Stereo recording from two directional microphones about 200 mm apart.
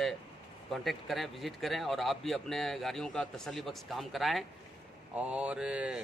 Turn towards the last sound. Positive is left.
turn(degrees=-5)  # may be behind; listen again after turning